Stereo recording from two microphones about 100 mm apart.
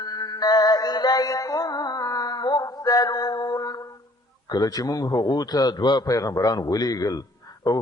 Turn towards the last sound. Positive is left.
turn(degrees=40)  # may be behind; listen again after turning